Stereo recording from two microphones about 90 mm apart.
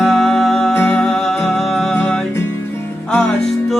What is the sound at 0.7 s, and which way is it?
Music, 20° left (ahead or behind).